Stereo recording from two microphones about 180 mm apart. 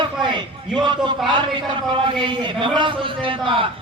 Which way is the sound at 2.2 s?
25° right (ahead or behind).